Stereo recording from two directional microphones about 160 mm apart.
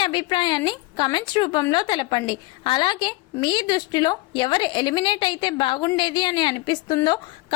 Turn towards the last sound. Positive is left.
turn(degrees=25)  # may be behind; listen again after turning